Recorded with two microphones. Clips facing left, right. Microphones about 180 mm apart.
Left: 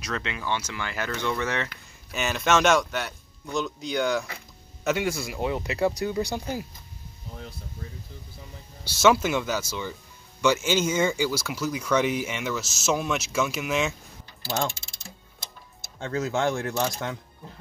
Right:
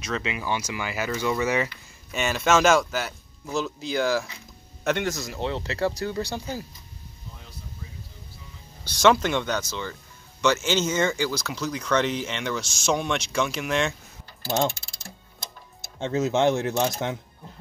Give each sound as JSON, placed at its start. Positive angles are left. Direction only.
{"t": 0.0, "sound": "speech", "side_deg": -5}
{"t": 8.8, "sound": "speech", "side_deg": 5}
{"t": 16.0, "sound": "speech", "side_deg": -20}